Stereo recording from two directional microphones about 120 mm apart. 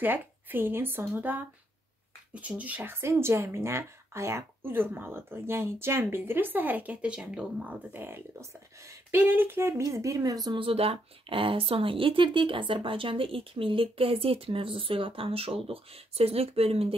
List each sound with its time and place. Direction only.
0.0 s speech: 15° right (ahead or behind); by 16.9 s 55° right (ahead or behind)